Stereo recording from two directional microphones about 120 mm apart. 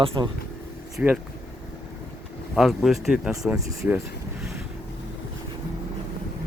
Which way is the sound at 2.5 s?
Centre (ahead or behind).